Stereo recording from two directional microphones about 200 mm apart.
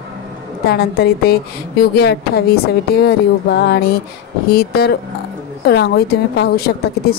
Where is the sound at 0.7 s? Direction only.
50° left (ahead or behind).